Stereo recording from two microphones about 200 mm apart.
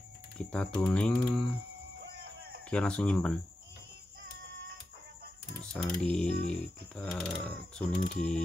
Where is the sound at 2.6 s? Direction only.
5° left (ahead or behind).